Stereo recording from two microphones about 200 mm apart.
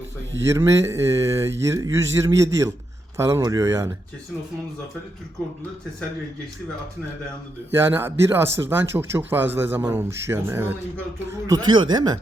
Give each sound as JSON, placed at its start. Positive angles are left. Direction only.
{"t": 0.4, "sound": "speech", "side_deg": -15}
{"t": 7.7, "sound": "speech", "side_deg": -10}